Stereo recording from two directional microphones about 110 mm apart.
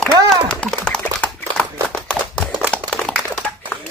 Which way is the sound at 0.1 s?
35° right (ahead or behind).